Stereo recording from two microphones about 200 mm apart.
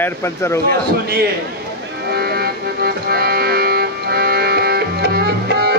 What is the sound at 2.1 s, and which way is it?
Music, 50° right (ahead or behind).